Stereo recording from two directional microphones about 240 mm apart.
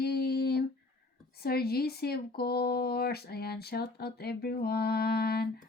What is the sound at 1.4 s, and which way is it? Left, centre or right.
Speech, left.